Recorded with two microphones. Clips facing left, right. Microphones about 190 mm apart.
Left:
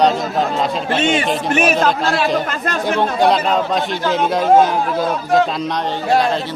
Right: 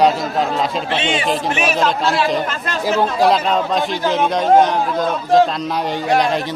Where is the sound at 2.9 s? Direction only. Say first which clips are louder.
Right 1 dB; centre (ahead or behind).